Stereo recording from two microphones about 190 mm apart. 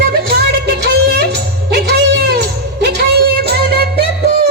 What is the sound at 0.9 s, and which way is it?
Music, 60° right (ahead or behind).